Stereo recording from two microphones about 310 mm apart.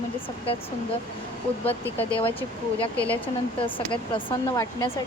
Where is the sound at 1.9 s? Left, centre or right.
Centre.